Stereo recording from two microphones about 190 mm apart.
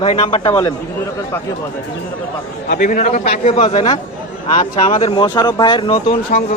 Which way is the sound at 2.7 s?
45° left (ahead or behind).